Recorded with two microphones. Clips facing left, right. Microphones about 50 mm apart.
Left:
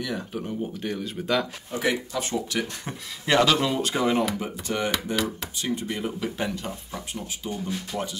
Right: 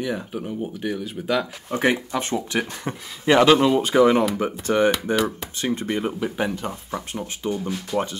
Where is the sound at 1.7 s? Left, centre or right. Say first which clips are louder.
Right 8 dB; right.